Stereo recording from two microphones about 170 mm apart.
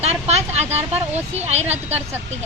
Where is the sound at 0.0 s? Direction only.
40° right (ahead or behind).